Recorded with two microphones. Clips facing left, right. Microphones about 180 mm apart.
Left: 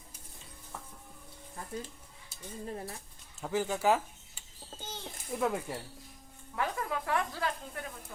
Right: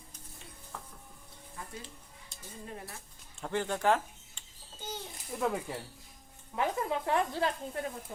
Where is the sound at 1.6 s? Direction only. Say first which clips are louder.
Left 1 dB; 40° left (ahead or behind).